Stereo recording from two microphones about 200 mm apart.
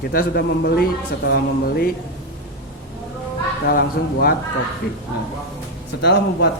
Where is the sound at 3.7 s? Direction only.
50° left (ahead or behind).